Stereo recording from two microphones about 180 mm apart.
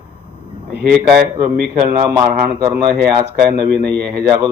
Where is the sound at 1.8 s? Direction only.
15° right (ahead or behind).